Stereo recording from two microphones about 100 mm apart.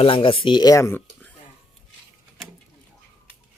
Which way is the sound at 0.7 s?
30° left (ahead or behind).